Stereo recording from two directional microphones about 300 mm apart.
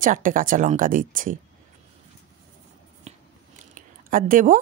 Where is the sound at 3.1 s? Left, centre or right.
Right.